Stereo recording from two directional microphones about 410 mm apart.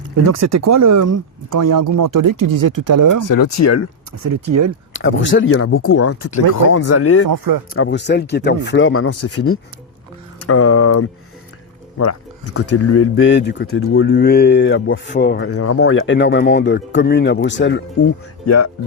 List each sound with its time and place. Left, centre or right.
0.2 s speech: right
3.2 s speech: left
4.2 s speech: right
4.9 s speech: left
7.3 s speech: right
7.7 s speech: left
18.4 s speech: left